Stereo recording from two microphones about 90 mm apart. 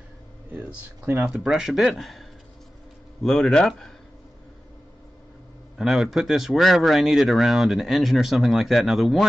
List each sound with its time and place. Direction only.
0.5 s speech: 20° right (ahead or behind)
1.5 s speech: centre (ahead or behind)
5.8 s speech: centre (ahead or behind)